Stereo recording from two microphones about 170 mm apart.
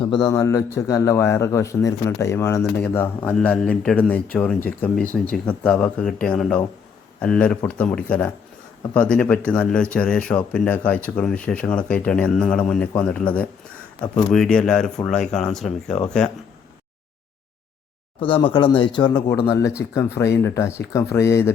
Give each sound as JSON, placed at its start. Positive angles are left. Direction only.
{"t": 0.0, "sound": "a man's voice", "side_deg": 25}
{"t": 18.2, "sound": "a man's voice", "side_deg": 30}